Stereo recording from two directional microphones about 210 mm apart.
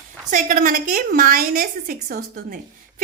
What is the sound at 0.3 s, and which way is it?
A woman's voice, 40° right (ahead or behind).